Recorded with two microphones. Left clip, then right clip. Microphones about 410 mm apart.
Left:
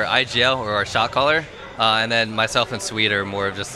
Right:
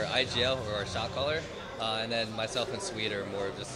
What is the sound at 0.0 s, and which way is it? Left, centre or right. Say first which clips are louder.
A man's voice: left 11 dB; left.